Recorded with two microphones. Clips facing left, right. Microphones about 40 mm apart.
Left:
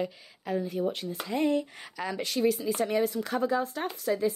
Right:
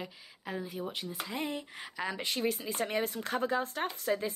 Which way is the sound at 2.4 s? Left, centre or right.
Right.